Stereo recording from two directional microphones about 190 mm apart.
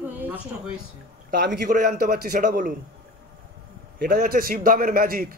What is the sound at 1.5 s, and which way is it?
A man's voice, 55° right (ahead or behind).